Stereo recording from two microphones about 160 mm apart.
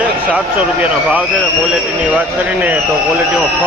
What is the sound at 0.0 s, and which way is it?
A man's voice, 10° right (ahead or behind).